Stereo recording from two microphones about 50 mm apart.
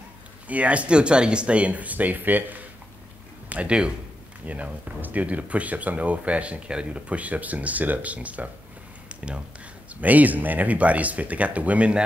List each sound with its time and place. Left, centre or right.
0.5 s speech: right
3.4 s speech: right
9.1 s a sound: right
9.9 s speech: right